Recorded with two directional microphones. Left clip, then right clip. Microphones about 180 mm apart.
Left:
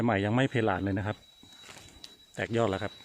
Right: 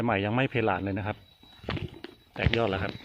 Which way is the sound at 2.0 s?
20° left (ahead or behind).